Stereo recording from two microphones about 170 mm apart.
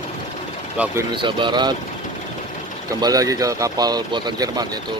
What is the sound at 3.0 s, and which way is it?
Speech, 20° right (ahead or behind).